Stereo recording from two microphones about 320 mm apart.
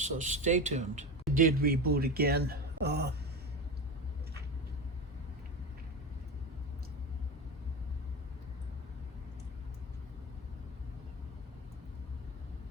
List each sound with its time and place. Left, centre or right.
0.0 s speech: right